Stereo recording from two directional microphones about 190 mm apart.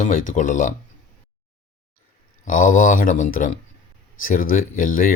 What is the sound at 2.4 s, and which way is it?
Speech, 45° left (ahead or behind).